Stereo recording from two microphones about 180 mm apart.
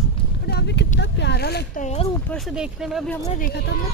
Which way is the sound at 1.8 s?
40° left (ahead or behind).